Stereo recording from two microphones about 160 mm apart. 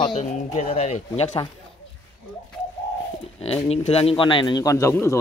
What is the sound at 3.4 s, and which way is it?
A man's voice, 40° left (ahead or behind).